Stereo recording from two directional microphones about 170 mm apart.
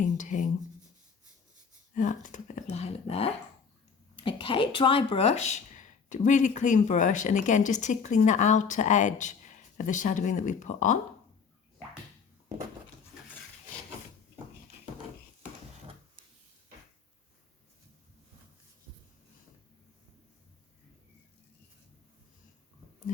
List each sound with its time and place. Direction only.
0.0 s speech: 45° left (ahead or behind)
2.0 s speech: 45° left (ahead or behind)